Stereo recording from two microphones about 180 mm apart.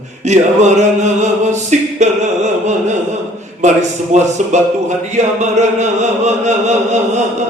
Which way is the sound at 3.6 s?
40° right (ahead or behind).